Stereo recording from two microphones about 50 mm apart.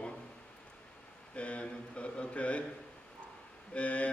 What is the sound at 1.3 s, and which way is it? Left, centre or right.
A man's voice, left.